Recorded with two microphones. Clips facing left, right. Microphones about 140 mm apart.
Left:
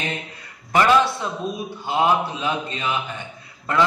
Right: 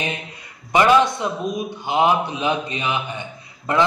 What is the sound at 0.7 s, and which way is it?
A man's voice, 15° right (ahead or behind).